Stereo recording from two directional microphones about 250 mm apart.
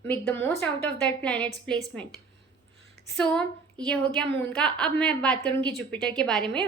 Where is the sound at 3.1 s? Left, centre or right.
Centre.